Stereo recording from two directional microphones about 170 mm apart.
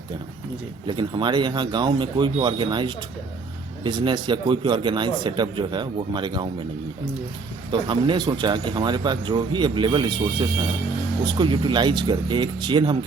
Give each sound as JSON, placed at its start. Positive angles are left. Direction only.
{"t": 0.9, "sound": "speech", "side_deg": -25}
{"t": 7.7, "sound": "speech", "side_deg": -30}